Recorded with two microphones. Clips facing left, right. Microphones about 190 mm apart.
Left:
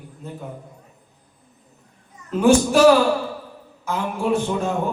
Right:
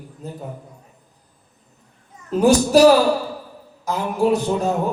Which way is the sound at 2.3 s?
40° right (ahead or behind).